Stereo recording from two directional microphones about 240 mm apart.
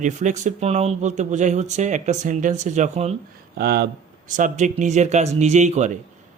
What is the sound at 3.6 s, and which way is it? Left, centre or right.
A man's voice, right.